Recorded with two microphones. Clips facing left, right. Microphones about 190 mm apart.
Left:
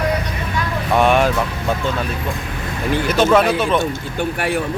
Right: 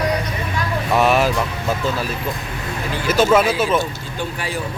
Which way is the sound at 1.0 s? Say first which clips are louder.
Left 2 dB; 5° right (ahead or behind).